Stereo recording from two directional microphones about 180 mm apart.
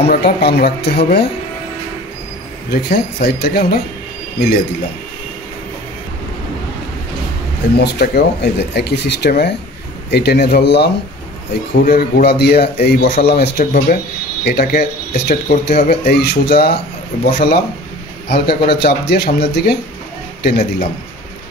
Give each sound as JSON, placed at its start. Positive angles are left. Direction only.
{"t": 0.1, "sound": "speech", "side_deg": 65}
{"t": 2.7, "sound": "speech", "side_deg": 60}
{"t": 7.7, "sound": "speech", "side_deg": 65}